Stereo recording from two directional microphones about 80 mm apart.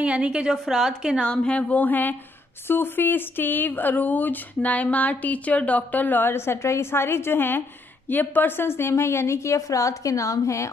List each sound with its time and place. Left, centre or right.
0.0 s a woman's voice: centre
1.2 s a woman's voice: centre; by 10.7 s left